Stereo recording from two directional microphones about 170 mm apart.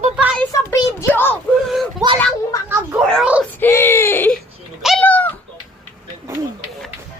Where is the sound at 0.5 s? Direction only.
20° left (ahead or behind).